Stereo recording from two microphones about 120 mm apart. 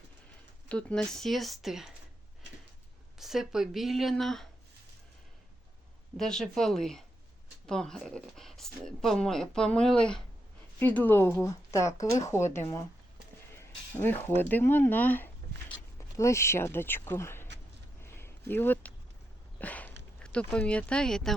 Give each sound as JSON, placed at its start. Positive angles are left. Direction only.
{"t": 0.7, "sound": "speech", "side_deg": 10}
{"t": 3.2, "sound": "speech", "side_deg": 0}
{"t": 6.1, "sound": "speech", "side_deg": 5}
{"t": 14.0, "sound": "speech", "side_deg": 15}
{"t": 18.0, "sound": "a sound", "side_deg": 20}
{"t": 19.5, "sound": "speech", "side_deg": 15}